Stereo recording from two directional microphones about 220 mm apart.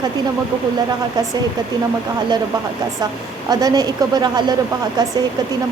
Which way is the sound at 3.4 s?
20° right (ahead or behind).